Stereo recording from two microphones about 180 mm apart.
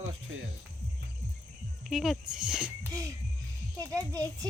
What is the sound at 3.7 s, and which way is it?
Speech, 20° right (ahead or behind).